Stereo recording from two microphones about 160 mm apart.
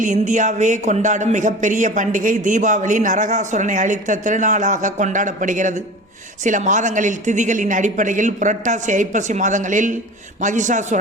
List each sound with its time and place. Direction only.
0.0 s speech: 50° right (ahead or behind)